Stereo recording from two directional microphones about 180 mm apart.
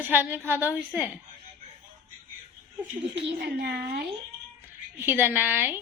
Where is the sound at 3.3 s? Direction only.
65° right (ahead or behind).